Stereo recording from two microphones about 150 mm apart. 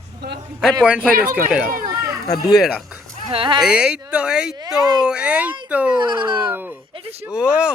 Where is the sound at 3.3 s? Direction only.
35° right (ahead or behind).